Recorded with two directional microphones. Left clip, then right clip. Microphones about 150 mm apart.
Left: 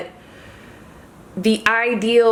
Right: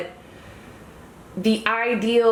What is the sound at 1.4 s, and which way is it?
Speech, 40° left (ahead or behind).